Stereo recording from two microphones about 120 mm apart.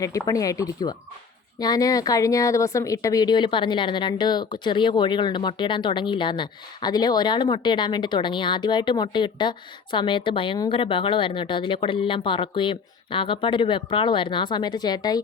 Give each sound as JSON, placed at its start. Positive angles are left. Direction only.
{"t": 0.0, "sound": "speech", "side_deg": 30}